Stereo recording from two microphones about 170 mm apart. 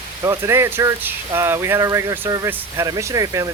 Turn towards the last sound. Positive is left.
turn(degrees=-20)  # may be behind; listen again after turning